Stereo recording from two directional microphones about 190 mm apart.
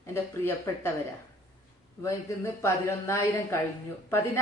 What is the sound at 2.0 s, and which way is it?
A woman's voice, 15° left (ahead or behind).